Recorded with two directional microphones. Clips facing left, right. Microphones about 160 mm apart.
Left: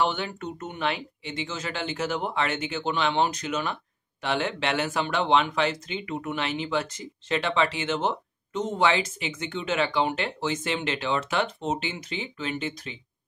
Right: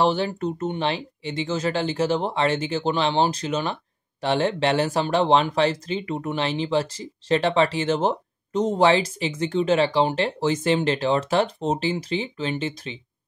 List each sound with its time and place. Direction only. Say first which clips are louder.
0.0 s speech: right 6 dB; 35° right (ahead or behind)